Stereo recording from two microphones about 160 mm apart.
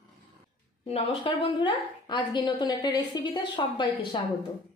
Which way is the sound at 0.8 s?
40° left (ahead or behind).